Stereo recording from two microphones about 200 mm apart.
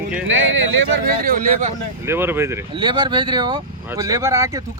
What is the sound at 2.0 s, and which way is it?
Speech, 10° right (ahead or behind).